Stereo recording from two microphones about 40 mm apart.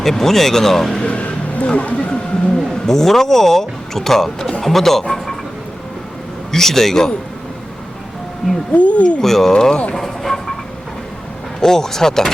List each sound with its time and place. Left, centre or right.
0.0 s speech: centre
1.0 s music: left
2.6 s speech: centre
6.5 s speech: centre
8.7 s speech: left
9.2 s speech: centre
9.9 s music: centre
11.6 s speech: centre